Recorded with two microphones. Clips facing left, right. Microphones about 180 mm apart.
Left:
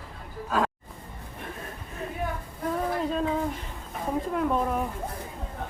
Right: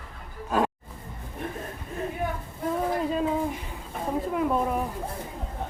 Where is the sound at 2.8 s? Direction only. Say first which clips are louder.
Right 1 dB; 5° right (ahead or behind).